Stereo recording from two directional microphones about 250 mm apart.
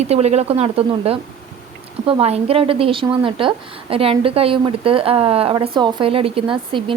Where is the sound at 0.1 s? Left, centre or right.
Right.